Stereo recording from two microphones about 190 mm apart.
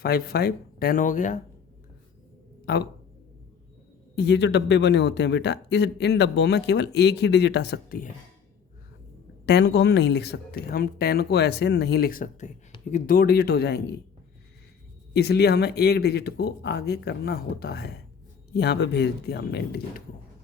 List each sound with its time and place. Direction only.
0.0 s speech: 55° left (ahead or behind)
2.7 s speech: 55° left (ahead or behind)
4.1 s speech: 60° left (ahead or behind)
9.5 s speech: 65° left (ahead or behind)
15.1 s speech: 60° left (ahead or behind)